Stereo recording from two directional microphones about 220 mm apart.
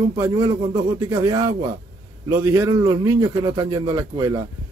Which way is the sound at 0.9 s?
15° right (ahead or behind).